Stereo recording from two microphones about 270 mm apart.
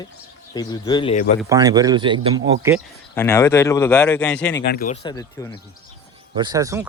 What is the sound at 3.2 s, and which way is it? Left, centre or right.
Speech, centre.